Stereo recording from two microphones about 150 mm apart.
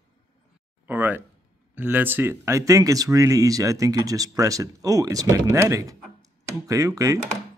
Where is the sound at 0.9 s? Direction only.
10° right (ahead or behind).